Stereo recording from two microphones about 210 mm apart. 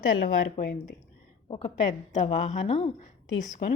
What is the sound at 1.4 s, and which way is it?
A woman's voice, 25° left (ahead or behind).